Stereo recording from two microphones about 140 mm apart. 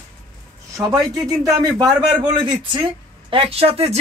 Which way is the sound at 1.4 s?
25° right (ahead or behind).